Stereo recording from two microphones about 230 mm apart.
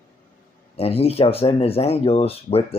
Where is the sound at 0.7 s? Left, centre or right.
Left.